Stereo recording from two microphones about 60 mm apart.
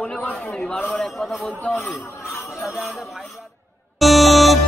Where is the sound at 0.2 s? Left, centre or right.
Left.